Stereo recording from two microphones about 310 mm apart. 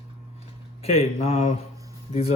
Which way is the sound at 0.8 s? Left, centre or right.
Centre.